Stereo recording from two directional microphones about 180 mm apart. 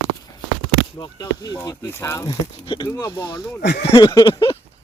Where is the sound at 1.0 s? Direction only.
20° left (ahead or behind).